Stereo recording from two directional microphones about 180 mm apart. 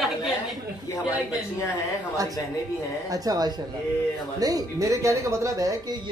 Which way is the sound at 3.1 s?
20° right (ahead or behind).